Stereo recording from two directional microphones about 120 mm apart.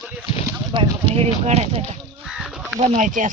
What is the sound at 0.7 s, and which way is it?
Speech, 45° right (ahead or behind).